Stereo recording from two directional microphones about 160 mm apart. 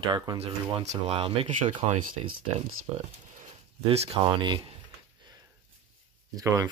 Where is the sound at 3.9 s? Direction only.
40° right (ahead or behind).